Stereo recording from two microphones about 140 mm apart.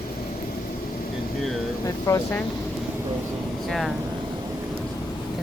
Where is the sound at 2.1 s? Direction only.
20° left (ahead or behind).